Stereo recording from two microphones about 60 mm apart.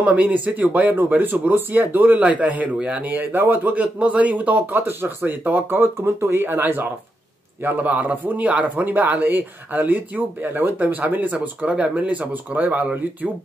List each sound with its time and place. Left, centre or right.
0.0 s speech: right